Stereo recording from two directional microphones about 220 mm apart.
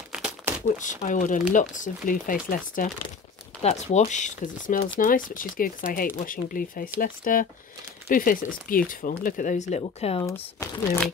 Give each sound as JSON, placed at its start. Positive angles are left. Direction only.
{"t": 0.1, "sound": "crumpling", "side_deg": -5}
{"t": 0.7, "sound": "speech", "side_deg": 35}
{"t": 10.2, "sound": "speech", "side_deg": 10}